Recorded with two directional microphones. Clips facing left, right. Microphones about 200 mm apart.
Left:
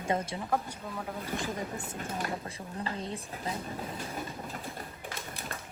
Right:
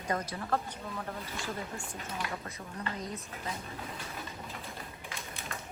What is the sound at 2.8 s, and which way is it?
Speech, 30° left (ahead or behind).